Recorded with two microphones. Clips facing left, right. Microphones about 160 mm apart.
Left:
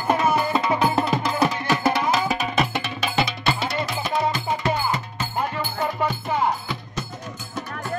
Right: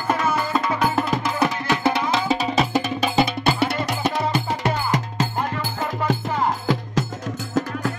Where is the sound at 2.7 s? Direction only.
40° right (ahead or behind).